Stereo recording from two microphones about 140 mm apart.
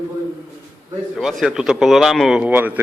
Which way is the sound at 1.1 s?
Centre (ahead or behind).